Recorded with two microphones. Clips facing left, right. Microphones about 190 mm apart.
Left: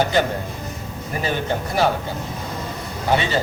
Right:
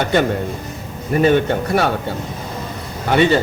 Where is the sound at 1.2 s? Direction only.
60° right (ahead or behind).